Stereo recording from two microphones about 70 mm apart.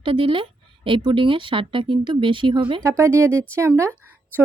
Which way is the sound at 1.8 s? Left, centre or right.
Right.